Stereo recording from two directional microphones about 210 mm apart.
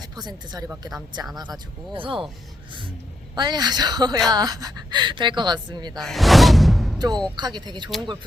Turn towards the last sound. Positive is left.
turn(degrees=-20)  # may be behind; listen again after turning